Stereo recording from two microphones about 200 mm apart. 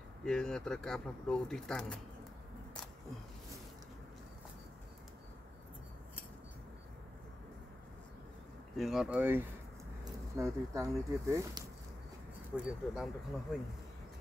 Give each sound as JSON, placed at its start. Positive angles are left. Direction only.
{"t": 0.2, "sound": "speech", "side_deg": 5}
{"t": 8.7, "sound": "speech", "side_deg": 0}
{"t": 12.5, "sound": "speech", "side_deg": 0}